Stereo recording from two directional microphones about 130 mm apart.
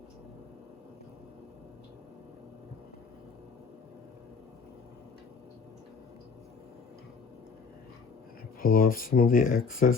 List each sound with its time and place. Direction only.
8.6 s speech: 90° left